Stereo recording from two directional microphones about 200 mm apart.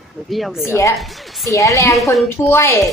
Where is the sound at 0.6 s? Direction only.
15° left (ahead or behind).